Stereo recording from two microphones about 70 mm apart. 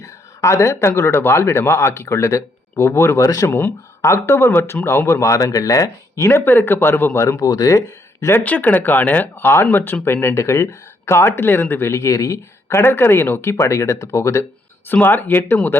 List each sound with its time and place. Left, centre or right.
0.0 s speech: left
7.5 s speech: left
7.9 s speech: left
8.4 s speech: left
10.3 s speech: left
12.6 s speech: left
15.0 s speech: left